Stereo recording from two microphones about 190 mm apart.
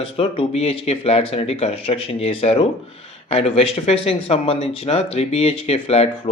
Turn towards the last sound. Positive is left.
turn(degrees=30)  # may be behind; listen again after turning